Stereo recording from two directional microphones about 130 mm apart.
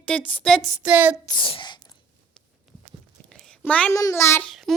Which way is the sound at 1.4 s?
40° left (ahead or behind).